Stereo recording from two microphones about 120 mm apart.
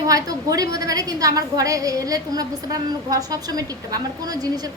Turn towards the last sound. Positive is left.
turn(degrees=-30)  # may be behind; listen again after turning